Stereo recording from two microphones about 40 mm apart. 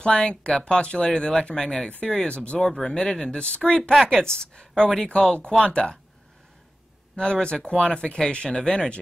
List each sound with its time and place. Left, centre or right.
0.0 s speech: left
2.0 s speech: left
2.6 s speech: centre; by 3.9 s left
3.9 s speech: centre
7.2 s speech: left